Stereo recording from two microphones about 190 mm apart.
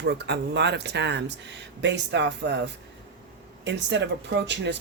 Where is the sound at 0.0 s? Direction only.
65° right (ahead or behind).